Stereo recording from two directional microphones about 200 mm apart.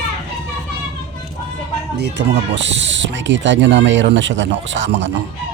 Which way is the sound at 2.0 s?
60° right (ahead or behind).